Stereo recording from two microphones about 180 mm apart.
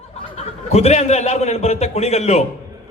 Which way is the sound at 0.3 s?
35° left (ahead or behind).